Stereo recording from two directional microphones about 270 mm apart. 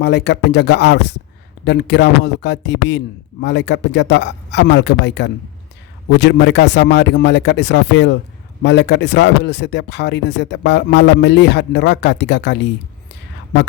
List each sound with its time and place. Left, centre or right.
0.0 s speech: left